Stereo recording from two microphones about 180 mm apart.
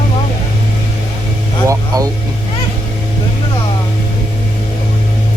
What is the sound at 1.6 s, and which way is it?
Vehicle, 20° right (ahead or behind).